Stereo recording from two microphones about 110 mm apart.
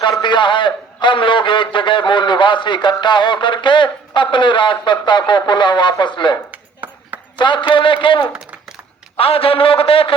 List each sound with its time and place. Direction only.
0.2 s a man's voice: 45° left (ahead or behind)
6.5 s ping: 15° right (ahead or behind)
7.3 s a man's voice: 45° left (ahead or behind)
8.3 s a sound: 5° right (ahead or behind)
9.1 s a man's voice: 60° left (ahead or behind)